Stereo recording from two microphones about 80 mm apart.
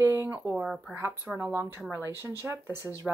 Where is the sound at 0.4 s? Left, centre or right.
Centre.